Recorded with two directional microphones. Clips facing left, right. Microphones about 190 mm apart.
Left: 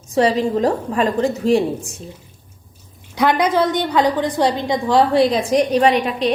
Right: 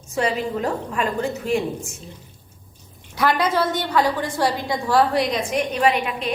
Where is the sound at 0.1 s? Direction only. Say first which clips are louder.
Left 7 dB; 35° left (ahead or behind).